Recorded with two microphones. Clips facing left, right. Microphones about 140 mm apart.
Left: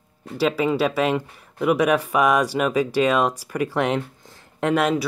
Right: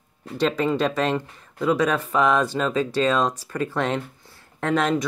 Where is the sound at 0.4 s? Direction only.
5° left (ahead or behind).